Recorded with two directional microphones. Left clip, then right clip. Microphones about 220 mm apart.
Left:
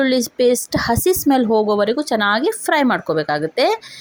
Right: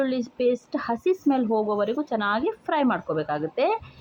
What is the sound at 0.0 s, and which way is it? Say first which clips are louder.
A woman's voice: left 8 dB; 50° left (ahead or behind).